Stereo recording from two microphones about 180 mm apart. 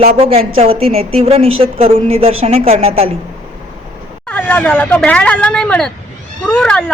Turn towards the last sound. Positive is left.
turn(degrees=5)  # may be behind; listen again after turning